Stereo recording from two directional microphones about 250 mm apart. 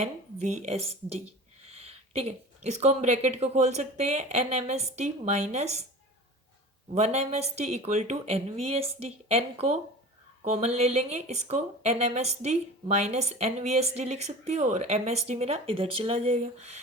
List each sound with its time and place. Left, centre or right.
0.0 s speech: right
6.9 s speech: right